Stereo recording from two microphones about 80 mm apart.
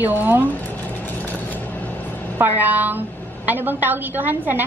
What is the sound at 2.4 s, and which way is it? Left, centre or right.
A woman's voice, right.